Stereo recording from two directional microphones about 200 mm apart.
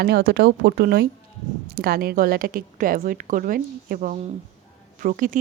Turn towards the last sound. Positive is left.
turn(degrees=-40)  # may be behind; listen again after turning